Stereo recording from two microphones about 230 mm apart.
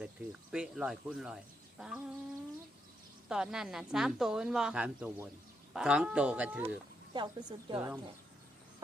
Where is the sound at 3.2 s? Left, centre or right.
Centre.